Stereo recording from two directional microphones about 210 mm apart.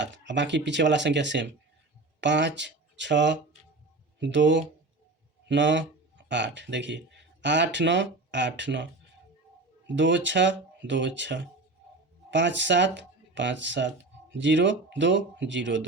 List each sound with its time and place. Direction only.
0.0 s speech: 55° right (ahead or behind)